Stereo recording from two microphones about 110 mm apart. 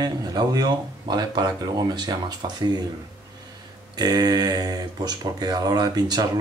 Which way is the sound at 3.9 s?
35° right (ahead or behind).